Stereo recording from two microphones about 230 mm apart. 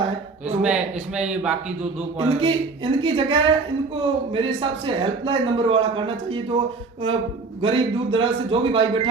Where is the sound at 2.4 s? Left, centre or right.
Right.